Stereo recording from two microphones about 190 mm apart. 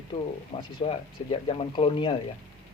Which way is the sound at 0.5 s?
30° left (ahead or behind).